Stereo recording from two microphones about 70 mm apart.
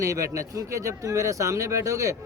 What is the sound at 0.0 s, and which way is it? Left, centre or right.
Speech, right.